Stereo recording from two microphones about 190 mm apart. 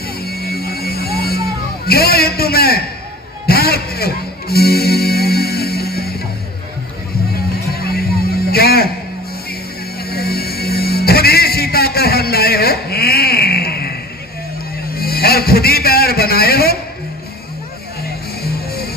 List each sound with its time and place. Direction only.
0.2 s music: 55° left (ahead or behind)
1.9 s a man's voice: 55° left (ahead or behind)
3.4 s music: 55° left (ahead or behind)
7.7 s music: 55° left (ahead or behind)
10.1 s music: 55° left (ahead or behind)
15.0 s a man's voice: 55° left (ahead or behind)
18.0 s music: 55° left (ahead or behind)